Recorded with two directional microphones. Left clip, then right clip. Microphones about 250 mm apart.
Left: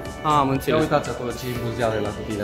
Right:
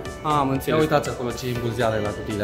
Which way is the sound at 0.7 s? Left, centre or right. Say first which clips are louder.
Right 2 dB; right.